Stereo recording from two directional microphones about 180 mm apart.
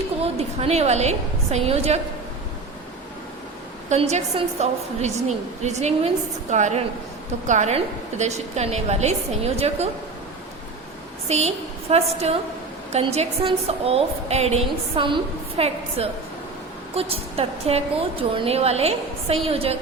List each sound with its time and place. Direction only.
0.2 s a woman's voice: 35° right (ahead or behind)
3.8 s a woman's voice: 40° right (ahead or behind)
11.3 s a woman's voice: 35° right (ahead or behind)